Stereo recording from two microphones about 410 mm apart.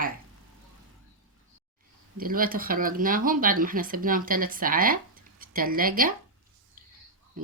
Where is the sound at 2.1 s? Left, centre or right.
Right.